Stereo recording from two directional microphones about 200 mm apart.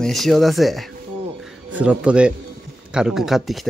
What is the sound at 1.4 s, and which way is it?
Music, 5° right (ahead or behind).